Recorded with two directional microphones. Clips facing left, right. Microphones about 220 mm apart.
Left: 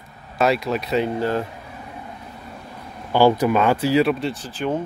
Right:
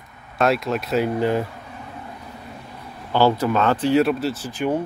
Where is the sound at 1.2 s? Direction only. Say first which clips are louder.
Right 2 dB; 15° right (ahead or behind).